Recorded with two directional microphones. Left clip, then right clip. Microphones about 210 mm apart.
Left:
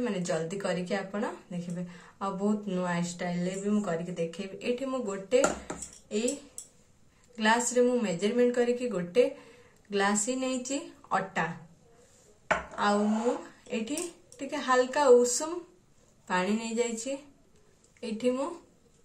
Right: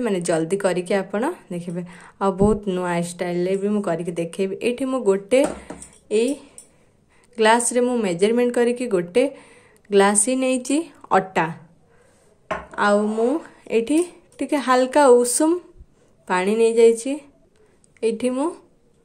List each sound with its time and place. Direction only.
0.0 s speech: 50° right (ahead or behind)
7.3 s speech: 50° right (ahead or behind)
12.7 s speech: 55° right (ahead or behind)